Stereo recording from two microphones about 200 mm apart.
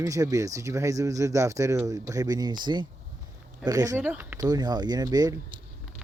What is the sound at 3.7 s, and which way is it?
Speech, 15° right (ahead or behind).